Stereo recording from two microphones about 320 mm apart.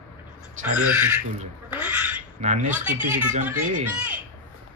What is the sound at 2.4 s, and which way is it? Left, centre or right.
A child's voice, right.